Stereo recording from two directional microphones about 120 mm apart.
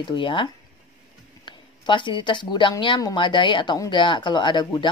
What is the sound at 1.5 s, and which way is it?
Speech, 40° left (ahead or behind).